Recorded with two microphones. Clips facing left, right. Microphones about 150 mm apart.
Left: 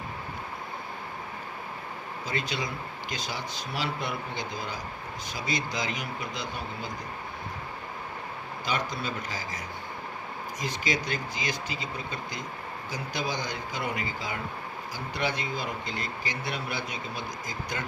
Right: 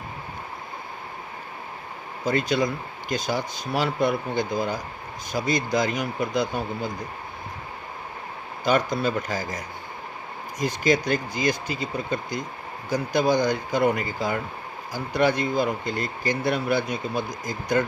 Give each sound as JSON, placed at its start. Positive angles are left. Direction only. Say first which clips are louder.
{"t": 2.2, "sound": "speech", "louder": "right 10 dB", "side_deg": -50}
{"t": 8.6, "sound": "speech", "louder": "right 10 dB", "side_deg": -50}
{"t": 10.6, "sound": "speech", "louder": "right 9 dB", "side_deg": -50}